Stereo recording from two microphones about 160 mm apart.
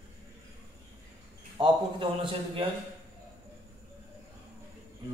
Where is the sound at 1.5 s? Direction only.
30° right (ahead or behind).